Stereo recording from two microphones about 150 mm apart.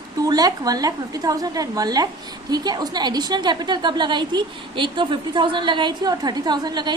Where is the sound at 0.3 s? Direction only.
25° right (ahead or behind).